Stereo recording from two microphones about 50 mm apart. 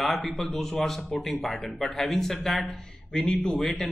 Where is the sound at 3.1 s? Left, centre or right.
Centre.